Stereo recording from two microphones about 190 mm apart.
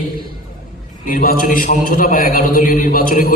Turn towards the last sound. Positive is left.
turn(degrees=45)  # may be behind; listen again after turning